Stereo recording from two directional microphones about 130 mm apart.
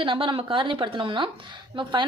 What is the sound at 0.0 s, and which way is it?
A woman's voice, 40° right (ahead or behind).